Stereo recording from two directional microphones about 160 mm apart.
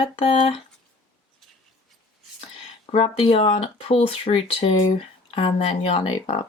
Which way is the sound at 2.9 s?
35° left (ahead or behind).